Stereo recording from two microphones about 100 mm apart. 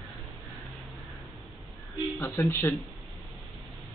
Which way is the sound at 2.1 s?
25° left (ahead or behind).